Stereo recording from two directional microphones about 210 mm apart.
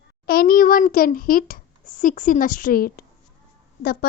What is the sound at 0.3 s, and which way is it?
A child's voice, 45° left (ahead or behind).